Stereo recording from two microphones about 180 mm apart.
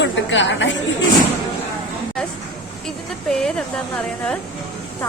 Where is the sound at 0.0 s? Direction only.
90° left.